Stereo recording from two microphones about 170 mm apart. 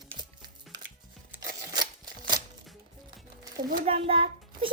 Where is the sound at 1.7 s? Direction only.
25° right (ahead or behind).